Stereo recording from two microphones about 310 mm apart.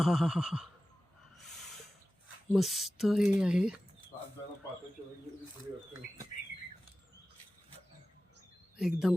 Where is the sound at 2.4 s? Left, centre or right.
Centre.